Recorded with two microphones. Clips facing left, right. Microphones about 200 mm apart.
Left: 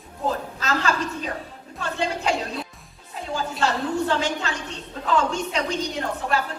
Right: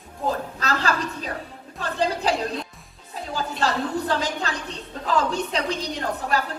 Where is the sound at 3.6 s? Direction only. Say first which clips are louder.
Left 1 dB; 35° right (ahead or behind).